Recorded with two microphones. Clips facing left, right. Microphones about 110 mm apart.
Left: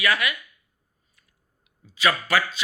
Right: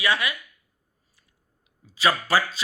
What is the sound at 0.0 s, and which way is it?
Speech, 25° right (ahead or behind).